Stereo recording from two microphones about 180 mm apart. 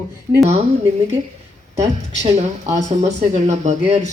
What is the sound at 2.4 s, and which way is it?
Speech, 40° right (ahead or behind).